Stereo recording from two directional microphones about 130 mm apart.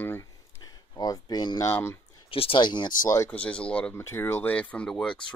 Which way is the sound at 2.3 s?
45° left (ahead or behind).